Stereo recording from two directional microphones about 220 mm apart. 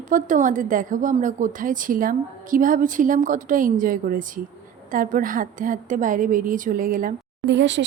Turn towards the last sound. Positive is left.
turn(degrees=-55)  # may be behind; listen again after turning